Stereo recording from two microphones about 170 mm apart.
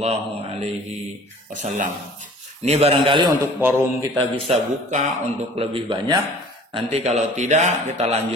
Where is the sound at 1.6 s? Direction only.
50° right (ahead or behind).